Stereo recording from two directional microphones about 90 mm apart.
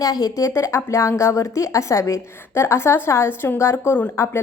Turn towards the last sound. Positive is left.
turn(degrees=30)  # may be behind; listen again after turning